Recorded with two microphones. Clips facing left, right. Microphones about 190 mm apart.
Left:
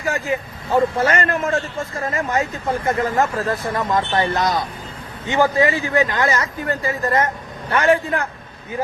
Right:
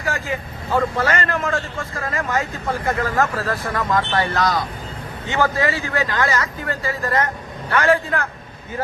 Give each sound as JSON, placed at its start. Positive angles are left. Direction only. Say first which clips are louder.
{"t": 0.7, "sound": "a man's voice", "louder": "left 3 dB", "side_deg": 25}